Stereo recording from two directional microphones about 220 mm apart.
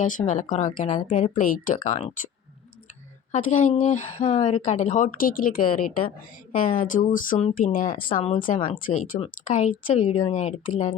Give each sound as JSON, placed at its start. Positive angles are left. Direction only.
{"t": 0.0, "sound": "speech", "side_deg": 35}
{"t": 3.3, "sound": "speech", "side_deg": 35}